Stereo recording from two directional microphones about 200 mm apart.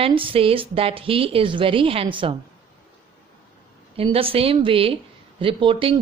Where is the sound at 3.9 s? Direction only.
30° right (ahead or behind).